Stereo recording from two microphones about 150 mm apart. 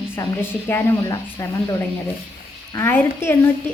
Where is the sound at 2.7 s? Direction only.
15° left (ahead or behind).